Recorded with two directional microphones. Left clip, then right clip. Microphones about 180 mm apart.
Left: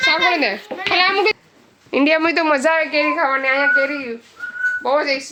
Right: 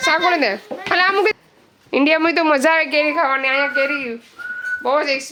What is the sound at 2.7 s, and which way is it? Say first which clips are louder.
Speech: right 1 dB; 55° right (ahead or behind).